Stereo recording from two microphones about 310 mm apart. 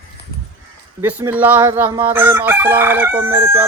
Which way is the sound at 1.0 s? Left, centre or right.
Centre.